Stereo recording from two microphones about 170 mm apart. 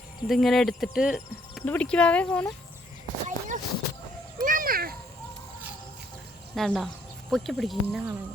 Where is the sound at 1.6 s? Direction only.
10° left (ahead or behind).